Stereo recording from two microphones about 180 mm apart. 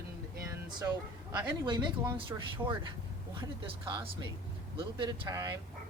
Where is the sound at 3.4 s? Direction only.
25° right (ahead or behind).